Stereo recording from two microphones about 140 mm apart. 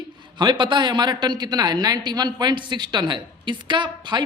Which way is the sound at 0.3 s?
35° right (ahead or behind).